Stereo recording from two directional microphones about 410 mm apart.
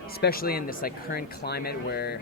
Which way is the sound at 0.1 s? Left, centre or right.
Left.